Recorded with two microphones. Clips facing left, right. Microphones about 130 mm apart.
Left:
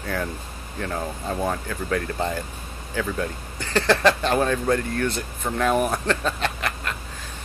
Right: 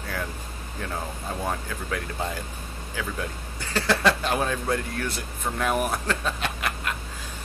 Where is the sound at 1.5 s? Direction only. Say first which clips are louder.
Left 4 dB; 5° right (ahead or behind).